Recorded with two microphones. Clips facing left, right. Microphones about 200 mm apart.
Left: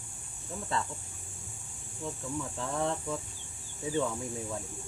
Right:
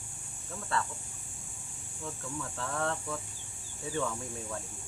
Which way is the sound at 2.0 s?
15° left (ahead or behind).